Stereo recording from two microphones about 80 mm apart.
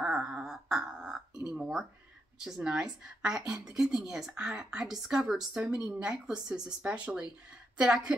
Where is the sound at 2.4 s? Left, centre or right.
Centre.